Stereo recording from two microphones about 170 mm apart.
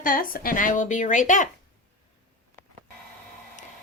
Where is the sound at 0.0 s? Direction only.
55° left (ahead or behind).